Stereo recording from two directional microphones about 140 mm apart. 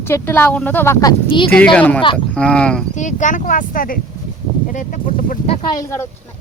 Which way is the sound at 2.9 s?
60° left (ahead or behind).